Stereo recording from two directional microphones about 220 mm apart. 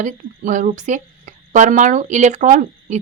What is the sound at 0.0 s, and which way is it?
Speech, 35° right (ahead or behind).